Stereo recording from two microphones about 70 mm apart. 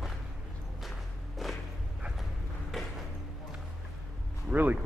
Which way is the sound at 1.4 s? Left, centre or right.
Centre.